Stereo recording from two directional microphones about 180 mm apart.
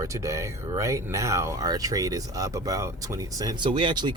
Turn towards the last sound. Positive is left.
turn(degrees=-25)  # may be behind; listen again after turning